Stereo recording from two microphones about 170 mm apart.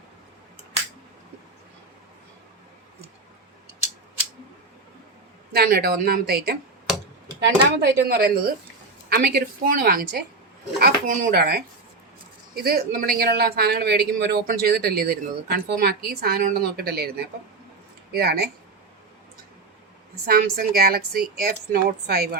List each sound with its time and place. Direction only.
5.5 s speech: 60° right (ahead or behind)
7.3 s speech: 80° right
12.6 s speech: 60° right (ahead or behind)
20.2 s speech: 60° right (ahead or behind)